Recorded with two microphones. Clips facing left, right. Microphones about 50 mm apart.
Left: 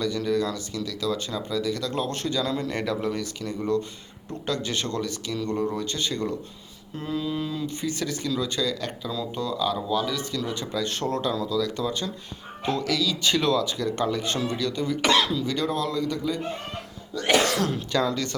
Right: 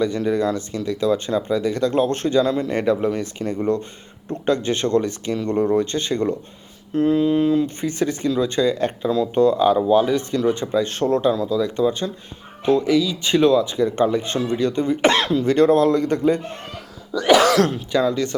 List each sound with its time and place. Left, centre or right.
0.0 s speech: right
17.7 s speech: centre